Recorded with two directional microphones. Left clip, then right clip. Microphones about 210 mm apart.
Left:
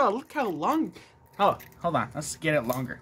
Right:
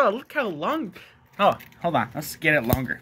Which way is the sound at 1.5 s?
10° right (ahead or behind).